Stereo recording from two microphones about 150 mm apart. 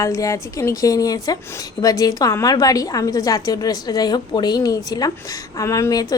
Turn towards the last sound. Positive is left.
turn(degrees=20)  # may be behind; listen again after turning